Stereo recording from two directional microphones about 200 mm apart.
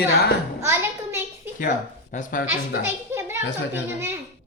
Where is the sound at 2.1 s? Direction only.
40° left (ahead or behind).